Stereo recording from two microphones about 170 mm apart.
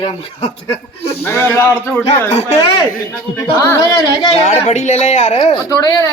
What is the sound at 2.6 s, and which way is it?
Speech, 25° left (ahead or behind).